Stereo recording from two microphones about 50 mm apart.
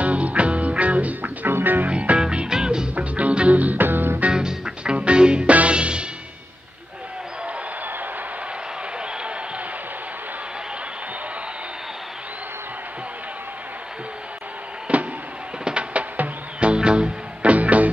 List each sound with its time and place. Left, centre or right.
0.0 s music: right
1.9 s music: right
2.9 s music: right
4.3 s music: centre
14.9 s a sound: right
15.6 s music: right